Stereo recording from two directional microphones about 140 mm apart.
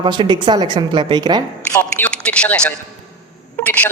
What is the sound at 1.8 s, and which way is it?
A man's voice, 10° left (ahead or behind).